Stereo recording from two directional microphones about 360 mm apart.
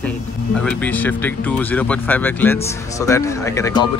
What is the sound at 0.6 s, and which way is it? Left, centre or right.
Speech, centre.